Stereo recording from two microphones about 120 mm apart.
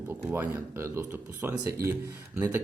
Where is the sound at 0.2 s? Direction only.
10° right (ahead or behind).